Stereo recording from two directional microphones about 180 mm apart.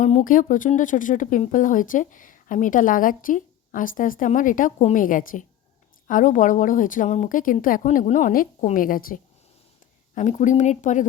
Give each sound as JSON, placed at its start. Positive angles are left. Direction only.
{"t": 0.0, "sound": "speech", "side_deg": 40}
{"t": 10.2, "sound": "speech", "side_deg": 40}